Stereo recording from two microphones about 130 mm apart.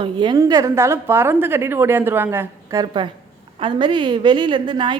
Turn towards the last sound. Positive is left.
turn(degrees=-35)  # may be behind; listen again after turning